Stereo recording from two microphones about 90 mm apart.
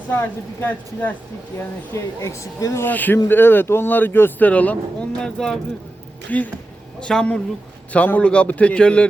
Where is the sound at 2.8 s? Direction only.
20° left (ahead or behind).